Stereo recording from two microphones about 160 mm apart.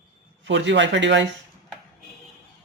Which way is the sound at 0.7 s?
90° right.